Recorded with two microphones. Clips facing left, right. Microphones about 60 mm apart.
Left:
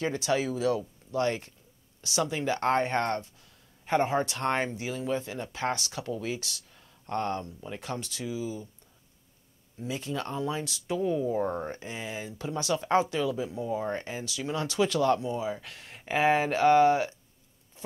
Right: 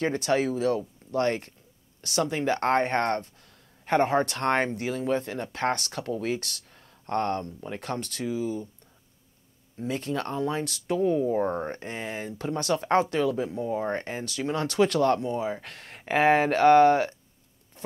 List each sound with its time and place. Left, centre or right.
0.0 s speech: right
9.8 s speech: right
11.0 s speech: right